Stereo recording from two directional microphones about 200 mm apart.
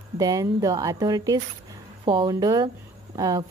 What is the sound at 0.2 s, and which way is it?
A woman's voice, 15° right (ahead or behind).